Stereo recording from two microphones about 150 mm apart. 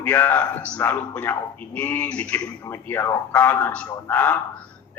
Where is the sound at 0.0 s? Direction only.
15° left (ahead or behind).